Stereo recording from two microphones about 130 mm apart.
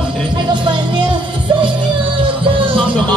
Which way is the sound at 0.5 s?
35° right (ahead or behind).